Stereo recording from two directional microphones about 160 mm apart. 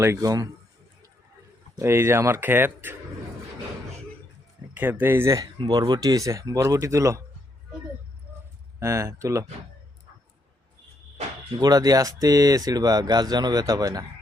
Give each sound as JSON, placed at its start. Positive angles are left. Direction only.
{"t": 0.0, "sound": "speech", "side_deg": -20}
{"t": 1.7, "sound": "speech", "side_deg": -15}
{"t": 4.7, "sound": "speech", "side_deg": -10}
{"t": 8.8, "sound": "speech", "side_deg": -20}
{"t": 11.6, "sound": "speech", "side_deg": -25}